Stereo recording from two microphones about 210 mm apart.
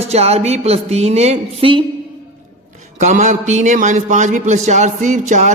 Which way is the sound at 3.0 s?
35° right (ahead or behind).